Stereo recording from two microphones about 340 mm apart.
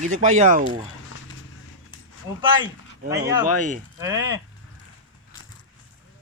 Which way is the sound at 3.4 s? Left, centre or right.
Right.